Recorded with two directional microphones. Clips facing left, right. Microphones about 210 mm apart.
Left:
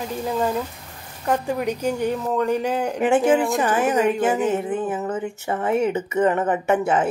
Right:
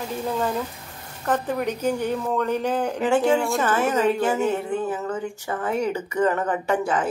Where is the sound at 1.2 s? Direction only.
10° left (ahead or behind).